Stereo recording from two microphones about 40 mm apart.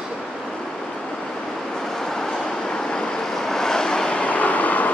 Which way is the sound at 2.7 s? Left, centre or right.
Centre.